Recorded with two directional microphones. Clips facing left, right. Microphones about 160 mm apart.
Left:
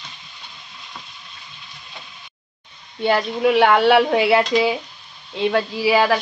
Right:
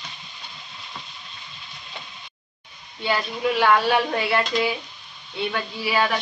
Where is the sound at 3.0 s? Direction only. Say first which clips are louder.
Left 6 dB; 60° left (ahead or behind); by 6.2 s 90° left.